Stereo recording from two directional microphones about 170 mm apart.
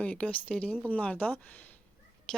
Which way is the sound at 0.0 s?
5° left (ahead or behind).